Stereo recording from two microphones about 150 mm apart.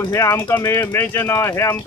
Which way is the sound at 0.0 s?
20° left (ahead or behind).